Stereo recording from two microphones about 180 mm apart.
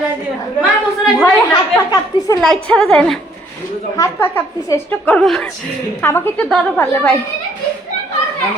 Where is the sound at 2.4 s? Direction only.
Centre (ahead or behind).